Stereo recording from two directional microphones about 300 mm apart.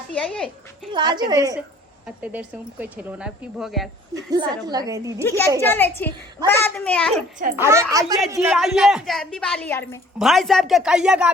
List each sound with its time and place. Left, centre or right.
0.1 s a woman's voice: centre
0.9 s a woman's voice: centre
4.1 s a woman's voice: centre
5.2 s a child's voice: centre
7.1 s speech: right
7.6 s a woman's voice: centre